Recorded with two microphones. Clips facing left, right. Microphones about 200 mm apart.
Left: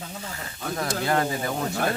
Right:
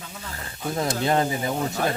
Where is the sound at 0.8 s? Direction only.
20° right (ahead or behind).